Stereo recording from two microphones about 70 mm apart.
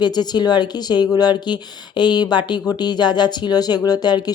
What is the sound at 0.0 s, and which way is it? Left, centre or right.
Speech, left.